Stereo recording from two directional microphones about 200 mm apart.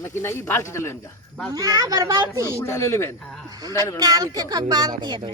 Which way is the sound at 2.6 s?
15° left (ahead or behind).